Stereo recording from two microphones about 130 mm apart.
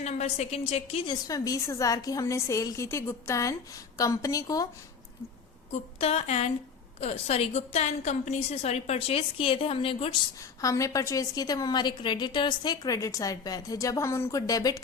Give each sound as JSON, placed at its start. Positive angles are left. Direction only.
{"t": 0.0, "sound": "a woman's voice", "side_deg": 60}
{"t": 1.2, "sound": "a woman's voice", "side_deg": 25}
{"t": 6.0, "sound": "a woman's voice", "side_deg": 55}
{"t": 10.6, "sound": "a woman's voice", "side_deg": 25}